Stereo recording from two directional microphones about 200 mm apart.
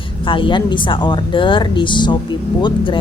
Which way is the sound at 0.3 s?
25° left (ahead or behind).